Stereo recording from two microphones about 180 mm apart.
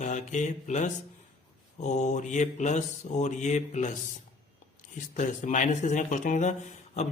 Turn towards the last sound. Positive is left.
turn(degrees=40)  # may be behind; listen again after turning